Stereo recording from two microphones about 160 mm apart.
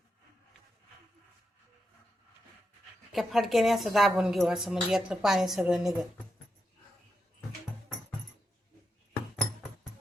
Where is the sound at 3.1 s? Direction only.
Centre (ahead or behind).